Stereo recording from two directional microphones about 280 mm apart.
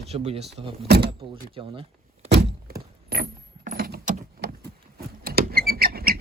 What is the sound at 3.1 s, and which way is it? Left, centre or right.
Keys jangling, right.